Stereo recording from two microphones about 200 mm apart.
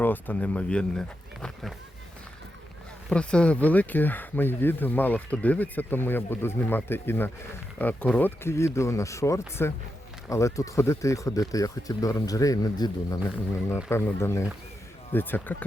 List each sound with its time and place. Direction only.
0.0 s speech: 10° left (ahead or behind)
3.1 s speech: 5° left (ahead or behind)